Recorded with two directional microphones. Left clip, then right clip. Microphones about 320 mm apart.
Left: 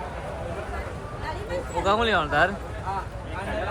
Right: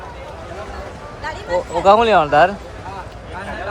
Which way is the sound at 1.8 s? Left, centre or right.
Centre.